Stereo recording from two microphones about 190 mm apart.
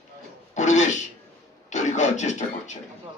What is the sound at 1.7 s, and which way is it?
A man's voice, 40° left (ahead or behind).